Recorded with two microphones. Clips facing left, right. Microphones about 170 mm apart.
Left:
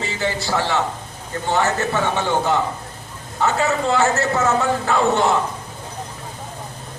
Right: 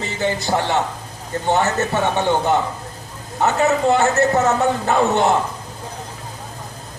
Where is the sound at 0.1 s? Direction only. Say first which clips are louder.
Right 4 dB; 20° right (ahead or behind).